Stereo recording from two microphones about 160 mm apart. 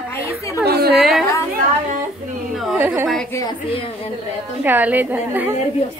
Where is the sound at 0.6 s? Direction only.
75° right (ahead or behind).